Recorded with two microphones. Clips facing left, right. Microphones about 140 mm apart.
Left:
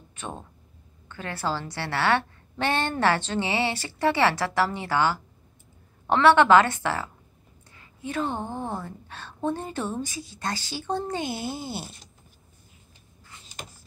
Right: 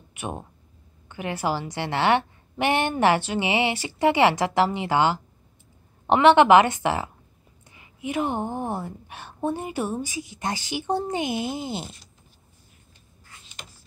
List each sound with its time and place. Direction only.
0.1 s a woman's voice: 15° right (ahead or behind)